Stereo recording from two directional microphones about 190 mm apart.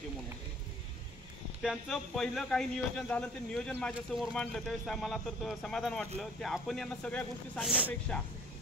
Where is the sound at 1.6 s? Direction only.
Centre (ahead or behind).